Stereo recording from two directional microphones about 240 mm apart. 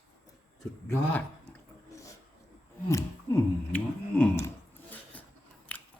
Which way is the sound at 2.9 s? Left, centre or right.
Centre.